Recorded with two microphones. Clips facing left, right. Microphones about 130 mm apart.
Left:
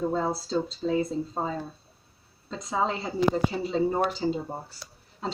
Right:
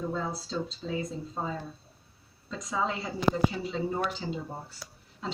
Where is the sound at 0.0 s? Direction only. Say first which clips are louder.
Left 6 dB; 35° left (ahead or behind).